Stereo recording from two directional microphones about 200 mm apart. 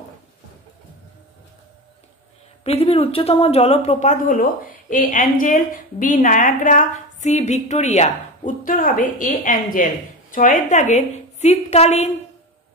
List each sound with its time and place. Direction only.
2.6 s speech: 30° left (ahead or behind)